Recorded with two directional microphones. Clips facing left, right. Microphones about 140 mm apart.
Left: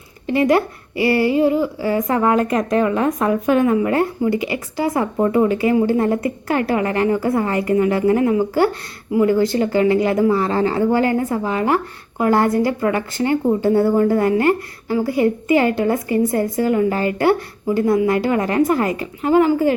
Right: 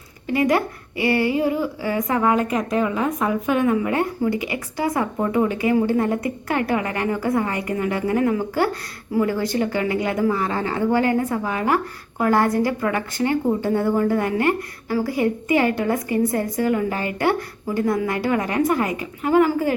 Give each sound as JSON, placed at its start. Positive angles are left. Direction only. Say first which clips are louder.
{"t": 0.3, "sound": "speech", "louder": "left 4 dB", "side_deg": 25}
{"t": 3.4, "sound": "speech", "louder": "left 4 dB", "side_deg": 40}
{"t": 4.3, "sound": "speech", "louder": "left 4 dB", "side_deg": 30}